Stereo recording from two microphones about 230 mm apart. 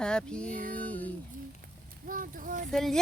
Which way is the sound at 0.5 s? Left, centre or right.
Right.